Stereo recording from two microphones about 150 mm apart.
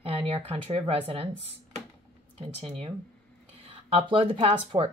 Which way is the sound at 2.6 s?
40° right (ahead or behind).